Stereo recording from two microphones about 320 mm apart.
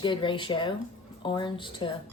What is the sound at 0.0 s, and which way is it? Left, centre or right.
Speech, centre.